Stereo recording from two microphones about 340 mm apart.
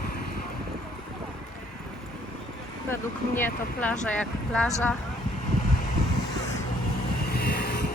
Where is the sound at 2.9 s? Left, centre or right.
Centre.